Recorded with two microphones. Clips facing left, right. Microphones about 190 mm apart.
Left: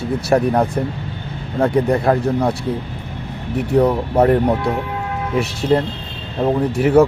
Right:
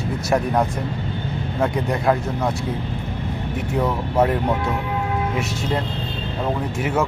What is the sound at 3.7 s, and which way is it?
Speech, 35° left (ahead or behind).